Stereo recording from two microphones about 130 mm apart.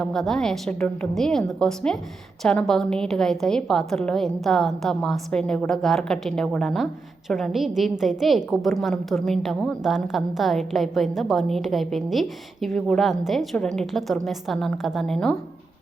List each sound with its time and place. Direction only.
0.0 s a woman's voice: 5° left (ahead or behind)